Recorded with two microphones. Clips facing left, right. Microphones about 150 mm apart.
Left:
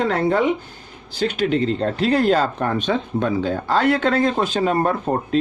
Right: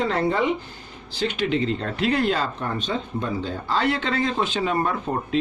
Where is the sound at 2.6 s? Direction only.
65° left (ahead or behind).